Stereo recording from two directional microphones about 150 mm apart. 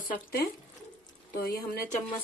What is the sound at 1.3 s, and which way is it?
Speech, 90° left.